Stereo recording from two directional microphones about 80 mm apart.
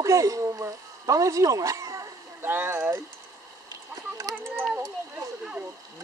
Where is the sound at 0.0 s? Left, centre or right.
Right.